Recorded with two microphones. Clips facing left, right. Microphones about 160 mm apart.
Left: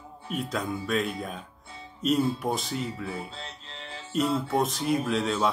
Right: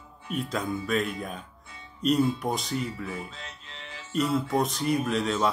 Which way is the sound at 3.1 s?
35° left (ahead or behind).